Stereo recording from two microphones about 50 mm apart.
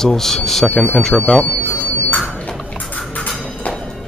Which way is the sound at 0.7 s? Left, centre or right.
Left.